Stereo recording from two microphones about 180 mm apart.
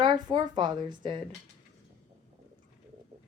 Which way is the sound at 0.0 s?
25° right (ahead or behind).